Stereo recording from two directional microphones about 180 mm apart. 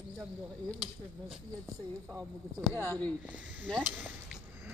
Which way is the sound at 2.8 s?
10° left (ahead or behind).